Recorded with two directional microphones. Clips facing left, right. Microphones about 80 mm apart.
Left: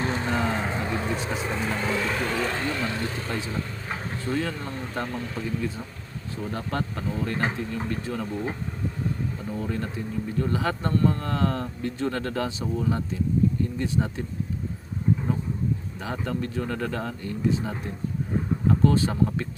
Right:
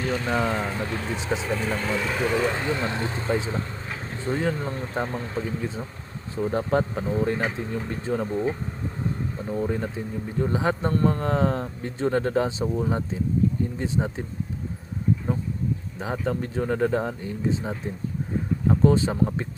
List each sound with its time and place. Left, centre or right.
0.0 s speech: left
1.1 s speech: right
1.5 s speech: centre
1.7 s speech: centre; by 8.4 s right
9.5 s speech: right
16.0 s speech: right